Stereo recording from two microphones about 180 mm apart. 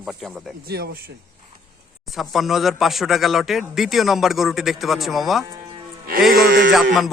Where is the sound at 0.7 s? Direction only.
60° right (ahead or behind).